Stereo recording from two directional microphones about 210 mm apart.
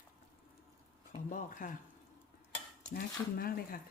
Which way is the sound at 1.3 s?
40° left (ahead or behind).